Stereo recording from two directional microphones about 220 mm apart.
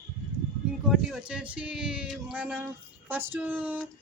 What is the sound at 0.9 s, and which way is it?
Speech, centre (ahead or behind).